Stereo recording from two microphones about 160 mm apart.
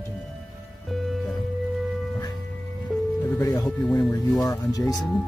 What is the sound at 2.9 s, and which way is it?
Music, centre (ahead or behind).